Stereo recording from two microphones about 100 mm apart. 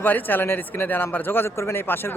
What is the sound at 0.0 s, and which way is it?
A man's voice, 20° left (ahead or behind).